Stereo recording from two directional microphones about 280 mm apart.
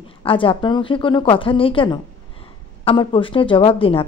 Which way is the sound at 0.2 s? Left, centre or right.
Centre.